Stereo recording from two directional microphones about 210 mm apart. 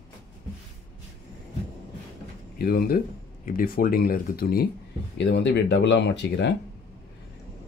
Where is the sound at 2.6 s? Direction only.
45° left (ahead or behind).